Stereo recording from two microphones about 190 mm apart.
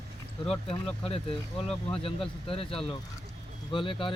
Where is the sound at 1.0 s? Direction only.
30° left (ahead or behind).